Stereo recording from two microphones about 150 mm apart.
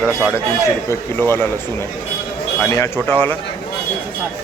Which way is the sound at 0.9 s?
15° left (ahead or behind).